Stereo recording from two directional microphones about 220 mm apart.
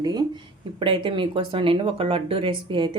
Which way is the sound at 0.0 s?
20° right (ahead or behind).